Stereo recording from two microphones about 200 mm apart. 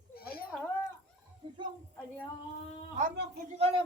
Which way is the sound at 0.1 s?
50° left (ahead or behind).